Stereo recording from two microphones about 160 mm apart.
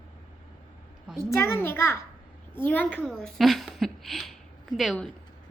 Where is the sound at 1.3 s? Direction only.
15° left (ahead or behind).